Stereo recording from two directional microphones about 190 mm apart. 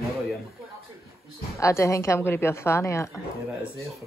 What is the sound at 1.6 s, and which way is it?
Speech, 15° left (ahead or behind).